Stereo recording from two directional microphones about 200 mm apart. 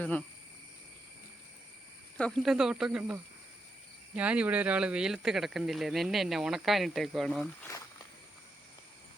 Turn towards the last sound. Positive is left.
turn(degrees=10)  # may be behind; listen again after turning